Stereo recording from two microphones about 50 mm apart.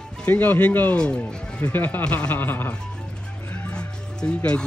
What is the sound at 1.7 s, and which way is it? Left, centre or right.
Speech, left.